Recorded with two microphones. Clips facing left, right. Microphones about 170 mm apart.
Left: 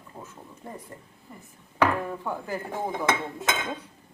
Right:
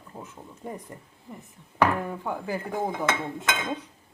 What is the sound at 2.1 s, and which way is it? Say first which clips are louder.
Chopping: right 1 dB; 10° right (ahead or behind).